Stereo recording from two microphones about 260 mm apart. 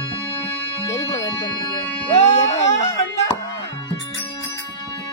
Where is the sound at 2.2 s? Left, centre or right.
Left.